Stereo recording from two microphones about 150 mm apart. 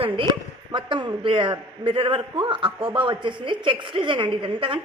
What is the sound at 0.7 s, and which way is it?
A man's voice, 30° right (ahead or behind).